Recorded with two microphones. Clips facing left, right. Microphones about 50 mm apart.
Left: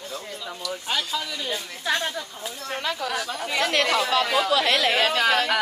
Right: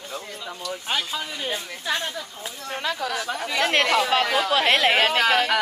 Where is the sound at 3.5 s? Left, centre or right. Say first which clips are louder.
Right 2 dB; right.